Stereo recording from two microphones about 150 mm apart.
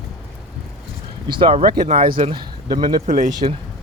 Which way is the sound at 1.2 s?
30° right (ahead or behind).